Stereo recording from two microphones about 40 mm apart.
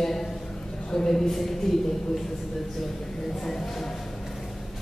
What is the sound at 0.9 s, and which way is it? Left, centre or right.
Speech, centre.